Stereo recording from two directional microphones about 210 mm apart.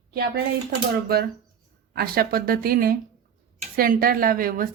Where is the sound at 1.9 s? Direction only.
45° right (ahead or behind).